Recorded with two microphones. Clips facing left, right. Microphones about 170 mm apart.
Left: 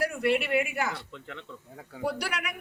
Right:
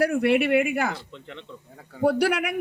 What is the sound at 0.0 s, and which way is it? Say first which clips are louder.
Speech: right 6 dB; 65° right (ahead or behind).